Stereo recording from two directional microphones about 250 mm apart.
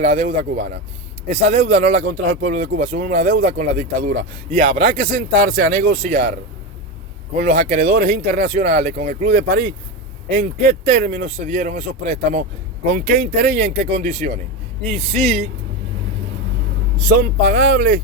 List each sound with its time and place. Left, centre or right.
0.0 s speech: right
7.4 s speech: right
17.1 s speech: right